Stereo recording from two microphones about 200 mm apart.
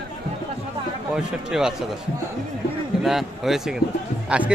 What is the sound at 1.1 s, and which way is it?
Speech, 5° right (ahead or behind).